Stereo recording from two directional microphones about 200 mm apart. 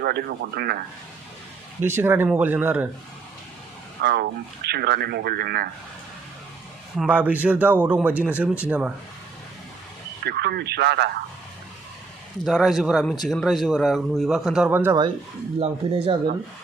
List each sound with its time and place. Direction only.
0.0 s speech: 55° right (ahead or behind)
1.8 s speech: 10° right (ahead or behind)
4.0 s speech: 55° right (ahead or behind)
6.9 s speech: 5° right (ahead or behind)
10.2 s speech: 55° right (ahead or behind)
12.5 s speech: centre (ahead or behind)
15.6 s speech: 30° right (ahead or behind)